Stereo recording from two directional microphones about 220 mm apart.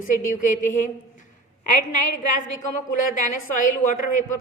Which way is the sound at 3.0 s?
35° left (ahead or behind).